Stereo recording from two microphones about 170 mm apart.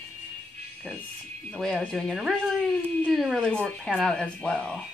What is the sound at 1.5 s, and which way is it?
Speech, 5° left (ahead or behind).